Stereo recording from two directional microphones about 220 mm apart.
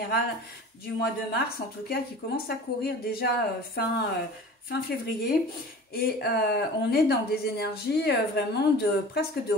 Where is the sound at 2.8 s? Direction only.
45° left (ahead or behind).